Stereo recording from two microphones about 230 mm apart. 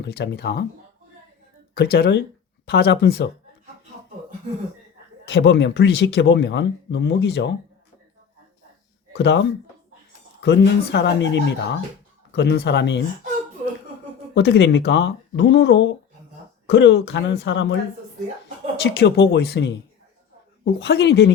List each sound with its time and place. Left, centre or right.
0.0 s speech: left
1.7 s speech: left
5.2 s speech: left
9.1 s speech: left
14.3 s speech: left
18.8 s speech: left